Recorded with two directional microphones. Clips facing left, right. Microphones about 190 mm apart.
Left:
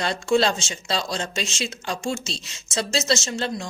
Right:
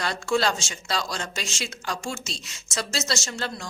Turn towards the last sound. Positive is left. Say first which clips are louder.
# left 5 dB
turn(degrees=25)  # may be behind; listen again after turning